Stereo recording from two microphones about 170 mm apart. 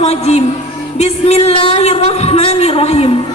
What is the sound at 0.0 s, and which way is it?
Music, 40° left (ahead or behind).